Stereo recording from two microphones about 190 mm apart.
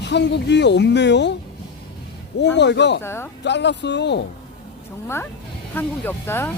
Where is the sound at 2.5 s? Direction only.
65° left (ahead or behind).